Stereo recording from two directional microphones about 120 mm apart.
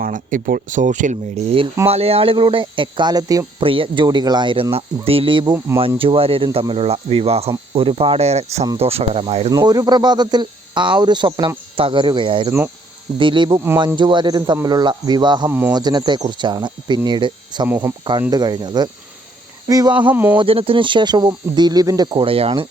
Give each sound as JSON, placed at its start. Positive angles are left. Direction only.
{"t": 0.1, "sound": "speech", "side_deg": -90}
{"t": 1.9, "sound": "speech", "side_deg": -55}
{"t": 3.6, "sound": "speech", "side_deg": -45}
{"t": 4.7, "sound": "speech", "side_deg": -50}
{"t": 9.5, "sound": "speech", "side_deg": -30}
{"t": 15.4, "sound": "speech", "side_deg": -20}
{"t": 15.7, "sound": "speech", "side_deg": -35}
{"t": 17.7, "sound": "speech", "side_deg": -15}
{"t": 18.3, "sound": "speech", "side_deg": -35}
{"t": 20.1, "sound": "speech", "side_deg": -15}
{"t": 20.4, "sound": "speech", "side_deg": -50}